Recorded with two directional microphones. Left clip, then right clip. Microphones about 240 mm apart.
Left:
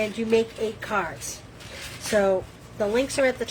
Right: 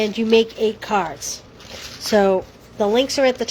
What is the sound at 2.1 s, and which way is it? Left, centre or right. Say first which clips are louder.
Speech: right 5 dB; right.